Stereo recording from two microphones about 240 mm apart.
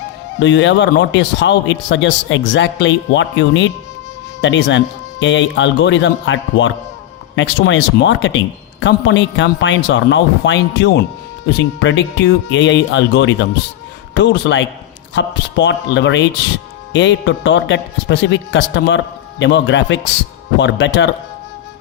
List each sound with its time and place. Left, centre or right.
0.3 s a man's voice: left